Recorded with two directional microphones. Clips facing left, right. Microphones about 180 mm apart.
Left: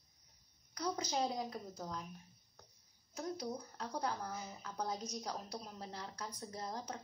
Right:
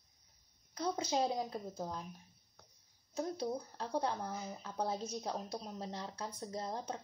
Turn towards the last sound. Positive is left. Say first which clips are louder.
# right 3 dB
turn(degrees=-25)  # may be behind; listen again after turning